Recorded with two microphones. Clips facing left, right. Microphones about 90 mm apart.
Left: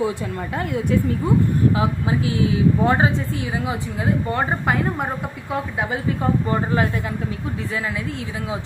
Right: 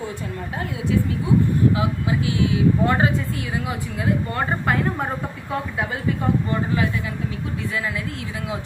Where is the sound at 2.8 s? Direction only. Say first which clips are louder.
Left 2 dB; 20° left (ahead or behind).